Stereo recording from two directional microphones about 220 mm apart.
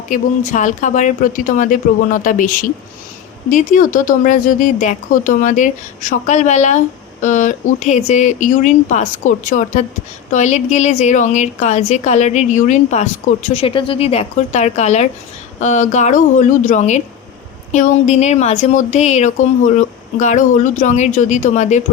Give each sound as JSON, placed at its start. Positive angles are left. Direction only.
{"t": 0.1, "sound": "speech", "side_deg": 35}